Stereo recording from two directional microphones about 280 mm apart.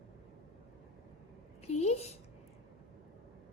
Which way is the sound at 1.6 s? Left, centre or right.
Left.